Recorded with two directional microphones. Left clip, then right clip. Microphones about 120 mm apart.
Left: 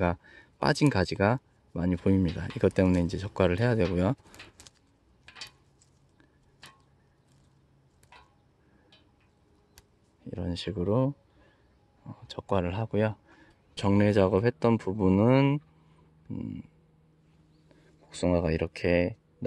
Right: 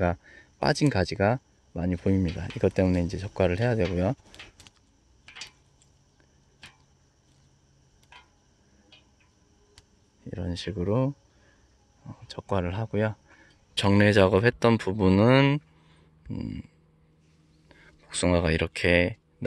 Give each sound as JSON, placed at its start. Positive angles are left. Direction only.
{"t": 0.0, "sound": "speech", "side_deg": 0}
{"t": 10.2, "sound": "speech", "side_deg": 5}